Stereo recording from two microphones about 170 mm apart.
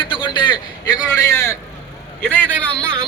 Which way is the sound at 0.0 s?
30° left (ahead or behind).